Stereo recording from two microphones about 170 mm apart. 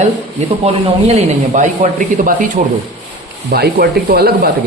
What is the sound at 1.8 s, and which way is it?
Speech, 55° right (ahead or behind).